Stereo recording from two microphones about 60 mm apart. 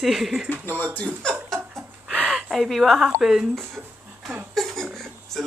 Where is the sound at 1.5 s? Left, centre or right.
Centre.